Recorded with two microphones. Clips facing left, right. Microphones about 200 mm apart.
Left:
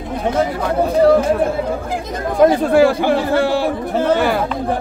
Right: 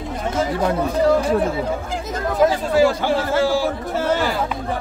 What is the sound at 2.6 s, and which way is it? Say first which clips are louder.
Speech: left 4 dB; 55° left (ahead or behind).